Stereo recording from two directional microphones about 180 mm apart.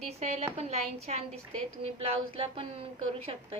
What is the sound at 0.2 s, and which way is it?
A woman's voice, 35° right (ahead or behind).